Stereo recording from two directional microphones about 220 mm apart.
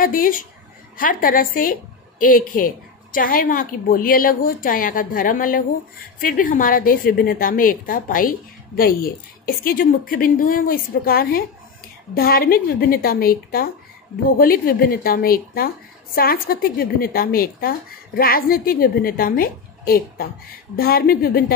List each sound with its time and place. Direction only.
0.0 s a woman's voice: 40° left (ahead or behind)